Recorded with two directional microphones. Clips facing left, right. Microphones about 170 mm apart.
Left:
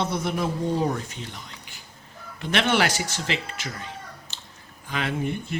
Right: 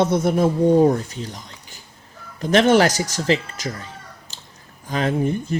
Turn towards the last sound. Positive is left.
turn(degrees=-40)  # may be behind; listen again after turning